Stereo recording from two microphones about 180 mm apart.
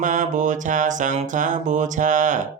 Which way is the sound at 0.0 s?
45° right (ahead or behind).